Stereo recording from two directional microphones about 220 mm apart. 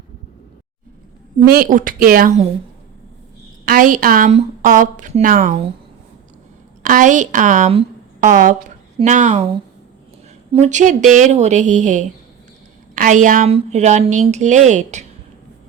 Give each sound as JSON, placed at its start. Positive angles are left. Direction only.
{"t": 1.5, "sound": "a woman's voice", "side_deg": -40}
{"t": 3.7, "sound": "a woman's voice", "side_deg": -40}
{"t": 6.8, "sound": "a woman's voice", "side_deg": -35}